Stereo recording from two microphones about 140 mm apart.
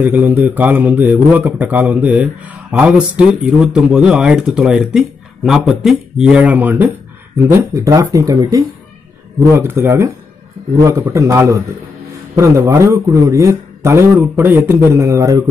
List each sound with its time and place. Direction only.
0.0 s a man's voice: 15° right (ahead or behind)
9.5 s a man's voice: 15° right (ahead or behind)